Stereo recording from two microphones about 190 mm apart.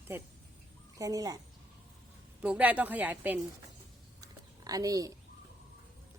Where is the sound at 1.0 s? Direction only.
20° right (ahead or behind).